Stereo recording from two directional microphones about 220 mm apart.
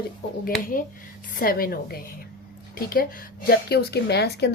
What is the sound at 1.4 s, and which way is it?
A woman's voice, 40° left (ahead or behind).